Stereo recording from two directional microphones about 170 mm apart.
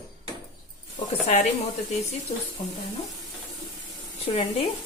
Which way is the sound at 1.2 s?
40° left (ahead or behind).